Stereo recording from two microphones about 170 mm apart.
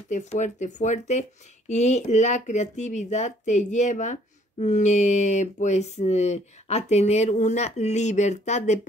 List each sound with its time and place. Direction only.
0.1 s speech: 45° left (ahead or behind)